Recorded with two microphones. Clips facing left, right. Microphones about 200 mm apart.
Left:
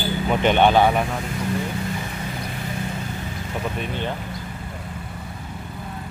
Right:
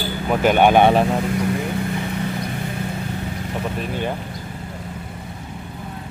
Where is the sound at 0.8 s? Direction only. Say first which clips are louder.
Right 4 dB; 30° right (ahead or behind).